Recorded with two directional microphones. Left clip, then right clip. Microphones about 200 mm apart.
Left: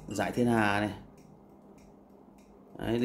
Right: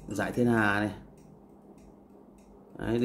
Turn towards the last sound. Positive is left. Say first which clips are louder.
# right 1 dB
turn(degrees=0)  # may be behind; listen again after turning